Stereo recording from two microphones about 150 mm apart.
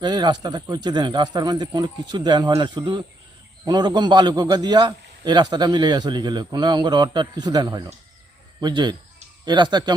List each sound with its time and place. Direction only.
0.0 s a man's voice: 30° right (ahead or behind)